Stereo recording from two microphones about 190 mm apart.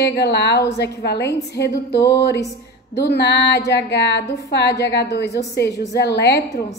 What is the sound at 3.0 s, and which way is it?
A woman's voice, 60° left (ahead or behind).